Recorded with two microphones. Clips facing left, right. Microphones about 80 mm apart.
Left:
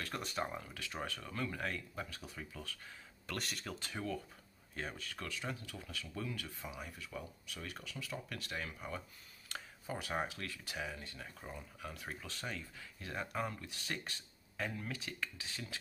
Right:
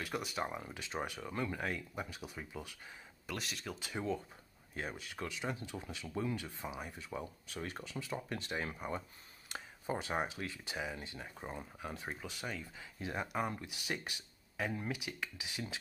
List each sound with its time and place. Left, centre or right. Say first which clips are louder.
0.0 s speech: right 2 dB; centre
0.7 s speech: right 3 dB; right
3.3 s speech: even; centre
3.8 s speech: right 4 dB; centre
12.2 s speech: right 2 dB; centre